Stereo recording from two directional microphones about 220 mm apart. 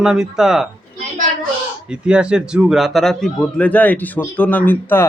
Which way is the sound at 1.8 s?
5° right (ahead or behind).